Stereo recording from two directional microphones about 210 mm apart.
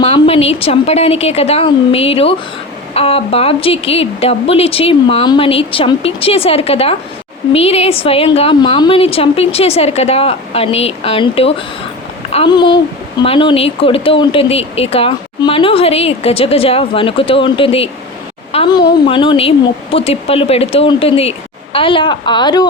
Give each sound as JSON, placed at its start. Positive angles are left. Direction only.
{"t": 0.0, "sound": "speech", "side_deg": 30}